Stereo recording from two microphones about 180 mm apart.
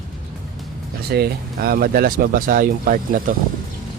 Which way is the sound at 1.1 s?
60° right (ahead or behind).